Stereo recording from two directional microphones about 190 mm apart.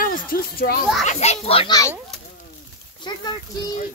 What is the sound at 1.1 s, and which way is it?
Speech, 35° left (ahead or behind).